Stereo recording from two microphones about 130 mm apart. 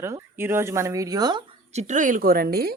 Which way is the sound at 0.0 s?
20° right (ahead or behind).